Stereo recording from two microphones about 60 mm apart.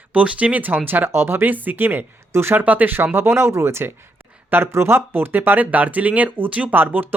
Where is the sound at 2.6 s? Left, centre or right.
Right.